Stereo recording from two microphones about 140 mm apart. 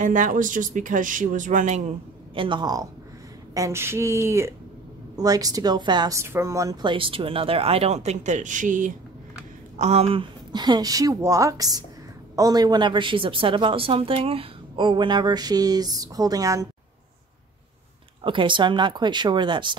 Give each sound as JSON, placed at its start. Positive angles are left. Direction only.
{"t": 0.0, "sound": "speech", "side_deg": -65}
{"t": 2.3, "sound": "a woman's voice", "side_deg": -35}
{"t": 6.1, "sound": "speech", "side_deg": -20}
{"t": 9.8, "sound": "a woman's voice", "side_deg": -50}
{"t": 18.2, "sound": "a woman's voice", "side_deg": -35}